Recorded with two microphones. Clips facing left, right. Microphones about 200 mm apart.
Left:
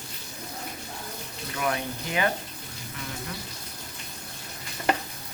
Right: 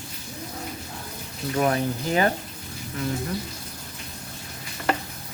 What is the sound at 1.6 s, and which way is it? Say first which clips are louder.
Speech: right 6 dB; 35° right (ahead or behind).